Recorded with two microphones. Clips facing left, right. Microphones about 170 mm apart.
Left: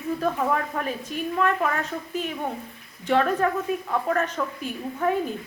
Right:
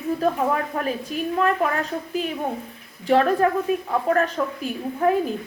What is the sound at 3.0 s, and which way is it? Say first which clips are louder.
A woman's voice: right 4 dB; 35° right (ahead or behind).